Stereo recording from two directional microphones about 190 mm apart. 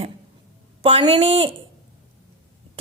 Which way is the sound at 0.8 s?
30° right (ahead or behind).